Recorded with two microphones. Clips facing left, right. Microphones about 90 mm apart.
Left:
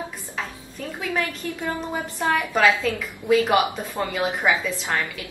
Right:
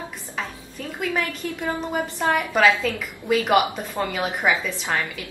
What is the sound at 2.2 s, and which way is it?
Speech, 10° right (ahead or behind).